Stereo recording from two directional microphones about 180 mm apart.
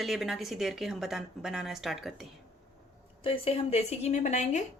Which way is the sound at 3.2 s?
30° left (ahead or behind).